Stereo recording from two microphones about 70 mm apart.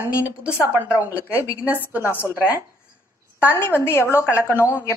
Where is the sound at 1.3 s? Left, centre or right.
Left.